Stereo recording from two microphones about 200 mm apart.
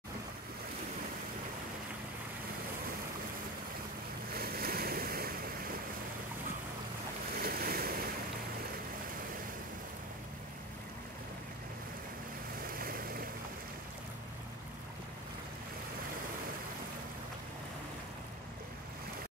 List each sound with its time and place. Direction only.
4.3 s waves: 50° right (ahead or behind)
7.3 s waves: 50° right (ahead or behind)
12.7 s boat: 45° right (ahead or behind)